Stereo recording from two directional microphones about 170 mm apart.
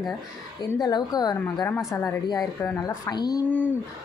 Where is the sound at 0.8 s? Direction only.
25° left (ahead or behind).